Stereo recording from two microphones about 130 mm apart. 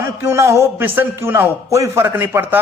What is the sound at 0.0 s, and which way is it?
A man's voice, 20° right (ahead or behind).